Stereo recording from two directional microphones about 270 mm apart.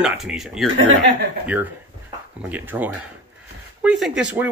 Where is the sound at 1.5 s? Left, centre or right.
Centre.